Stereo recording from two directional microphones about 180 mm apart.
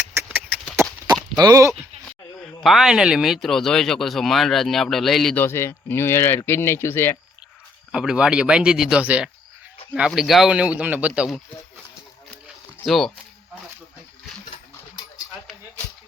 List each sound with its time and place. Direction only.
0.1 s a sound: 10° right (ahead or behind)
1.4 s bleat: 20° right (ahead or behind)
2.4 s speech: centre (ahead or behind)
7.9 s speech: 5° right (ahead or behind)
12.8 s speech: centre (ahead or behind)